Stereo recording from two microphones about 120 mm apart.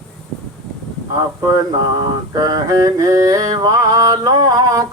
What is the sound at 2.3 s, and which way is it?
Male singing, 30° right (ahead or behind).